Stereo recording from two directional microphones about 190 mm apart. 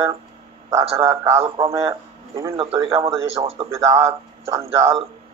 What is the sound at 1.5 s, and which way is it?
Speech, 15° right (ahead or behind).